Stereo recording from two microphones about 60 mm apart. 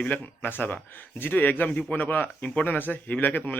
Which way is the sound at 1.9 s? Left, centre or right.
Left.